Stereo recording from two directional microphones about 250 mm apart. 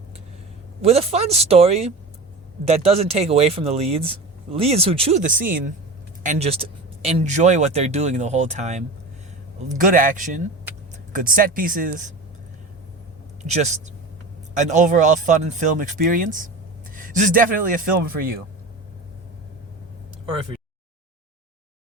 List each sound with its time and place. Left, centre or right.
0.8 s speech: right
13.4 s speech: right